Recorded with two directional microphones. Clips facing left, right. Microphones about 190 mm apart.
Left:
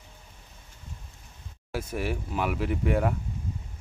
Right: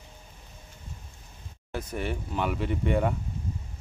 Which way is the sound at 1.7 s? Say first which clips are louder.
Left 1 dB; 5° left (ahead or behind).